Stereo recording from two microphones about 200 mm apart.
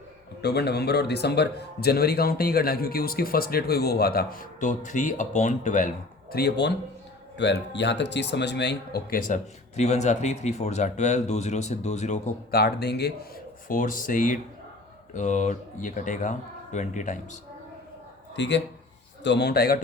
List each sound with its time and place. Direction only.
0.4 s a man's voice: 55° left (ahead or behind); by 5.9 s 40° left (ahead or behind)
6.3 s a man's voice: 55° left (ahead or behind); by 12.3 s 35° left (ahead or behind)
12.5 s a man's voice: 50° left (ahead or behind)
18.3 s a man's voice: 60° left (ahead or behind)